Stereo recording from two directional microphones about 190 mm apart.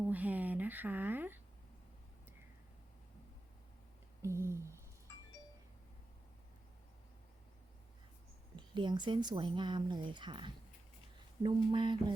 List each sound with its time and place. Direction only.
0.1 s speech: 10° right (ahead or behind)
4.2 s a sound: 15° right (ahead or behind)
8.5 s a woman's voice: 25° right (ahead or behind)